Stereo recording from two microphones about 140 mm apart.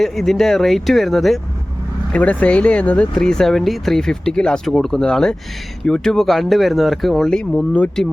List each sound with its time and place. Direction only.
0.0 s speech: centre (ahead or behind)